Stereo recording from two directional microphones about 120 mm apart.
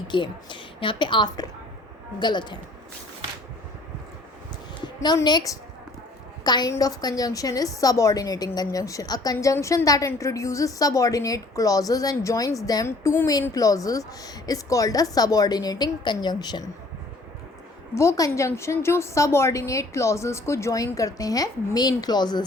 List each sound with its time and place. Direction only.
0.1 s a woman's voice: 40° left (ahead or behind)
4.9 s a woman's voice: 35° left (ahead or behind)
17.9 s a woman's voice: 25° left (ahead or behind)